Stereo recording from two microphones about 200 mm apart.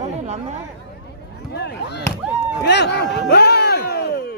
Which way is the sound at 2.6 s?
55° left (ahead or behind).